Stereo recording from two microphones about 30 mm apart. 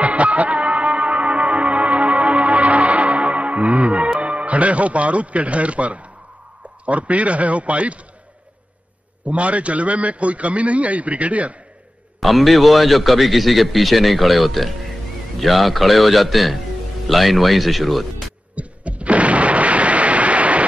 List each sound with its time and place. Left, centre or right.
0.0 s music: right
4.2 s a man's voice: right
9.2 s a man's voice: right
12.2 s a man's voice: centre
18.5 s artillery fire: right